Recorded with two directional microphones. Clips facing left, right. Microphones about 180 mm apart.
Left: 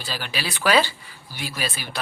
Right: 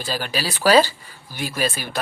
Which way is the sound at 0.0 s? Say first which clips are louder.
Right 5 dB; 45° right (ahead or behind).